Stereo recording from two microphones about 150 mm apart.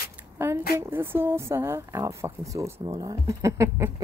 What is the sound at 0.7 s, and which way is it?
Speech, 15° right (ahead or behind).